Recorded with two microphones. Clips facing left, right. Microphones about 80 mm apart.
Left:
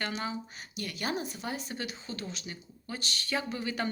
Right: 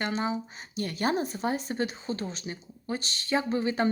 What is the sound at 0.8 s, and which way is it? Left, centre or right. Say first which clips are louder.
Speech: right 6 dB; right.